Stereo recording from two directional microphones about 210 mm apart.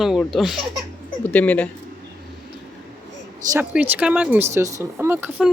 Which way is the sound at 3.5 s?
10° right (ahead or behind).